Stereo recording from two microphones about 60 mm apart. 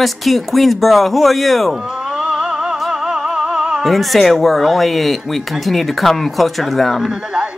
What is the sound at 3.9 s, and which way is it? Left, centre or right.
Speech, centre.